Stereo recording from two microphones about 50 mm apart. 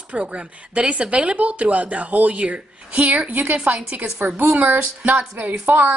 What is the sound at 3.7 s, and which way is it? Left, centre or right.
Speech, right.